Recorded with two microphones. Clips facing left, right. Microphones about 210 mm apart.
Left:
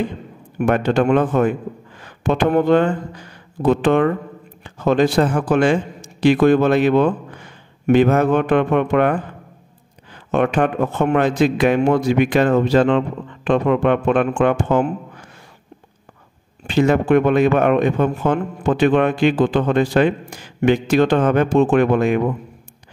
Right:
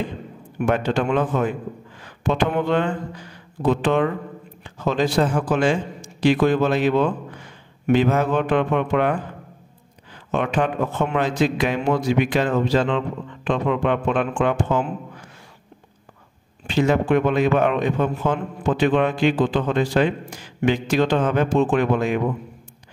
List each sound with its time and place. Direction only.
0.6 s speech: 55° left (ahead or behind)
3.6 s a man's voice: 55° left (ahead or behind)
10.3 s a man's voice: 55° left (ahead or behind)
16.6 s a man's voice: 55° left (ahead or behind)